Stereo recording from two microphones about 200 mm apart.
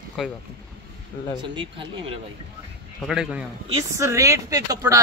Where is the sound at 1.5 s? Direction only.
25° right (ahead or behind).